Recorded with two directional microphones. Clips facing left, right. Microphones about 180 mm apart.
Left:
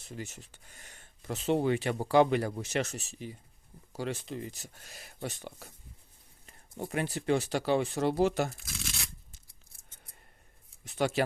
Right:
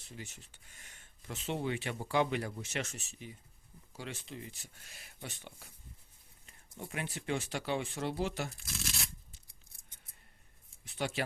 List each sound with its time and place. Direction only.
0.1 s speech: 45° left (ahead or behind)
8.5 s shuffling cards: centre (ahead or behind)
10.8 s speech: 45° left (ahead or behind)